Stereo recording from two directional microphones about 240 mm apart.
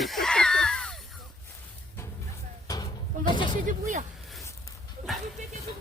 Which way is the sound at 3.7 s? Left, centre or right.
Right.